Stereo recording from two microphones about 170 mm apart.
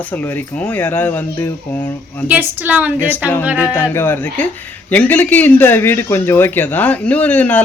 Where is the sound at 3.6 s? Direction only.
15° left (ahead or behind).